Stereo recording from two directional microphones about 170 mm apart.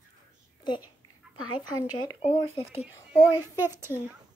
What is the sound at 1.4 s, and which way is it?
Speech, 25° left (ahead or behind).